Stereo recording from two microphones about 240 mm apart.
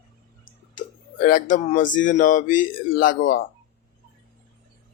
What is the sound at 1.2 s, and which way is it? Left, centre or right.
Speech, left.